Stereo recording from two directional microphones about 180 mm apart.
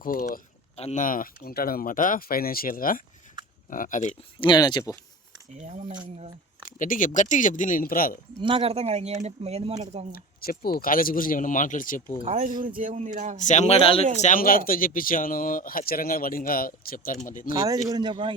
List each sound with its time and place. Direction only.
0.0 s speech: 55° left (ahead or behind)
0.8 s speech: 40° left (ahead or behind)
4.4 s speech: 25° left (ahead or behind)
5.5 s speech: 40° right (ahead or behind)
6.7 s speech: 50° left (ahead or behind)
8.4 s speech: 30° right (ahead or behind)
10.4 s speech: 55° left (ahead or behind)
12.2 s speech: 40° right (ahead or behind)
13.4 s a man's voice: 40° left (ahead or behind)
14.2 s speech: 45° left (ahead or behind)
17.8 s speech: 25° right (ahead or behind)